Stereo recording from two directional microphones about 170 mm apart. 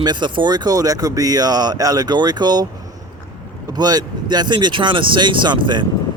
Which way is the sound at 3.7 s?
25° right (ahead or behind).